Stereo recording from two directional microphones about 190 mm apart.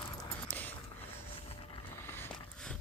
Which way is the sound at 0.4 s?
10° left (ahead or behind).